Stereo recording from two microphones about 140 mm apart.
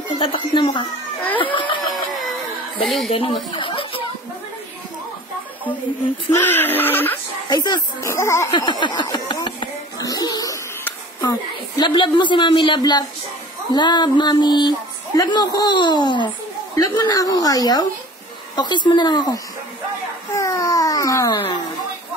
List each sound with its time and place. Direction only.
0.2 s speech: 35° left (ahead or behind)
1.4 s laughter: 35° left (ahead or behind)
2.8 s speech: centre (ahead or behind)
3.1 s a sound: 40° left (ahead or behind)
6.3 s speech: 15° left (ahead or behind)
7.4 s speech: 30° left (ahead or behind)
8.1 s a woman's voice: 20° left (ahead or behind)
8.5 s a sound: 30° left (ahead or behind)
11.1 s a woman's voice: 25° left (ahead or behind)
20.3 s a sound: 25° left (ahead or behind)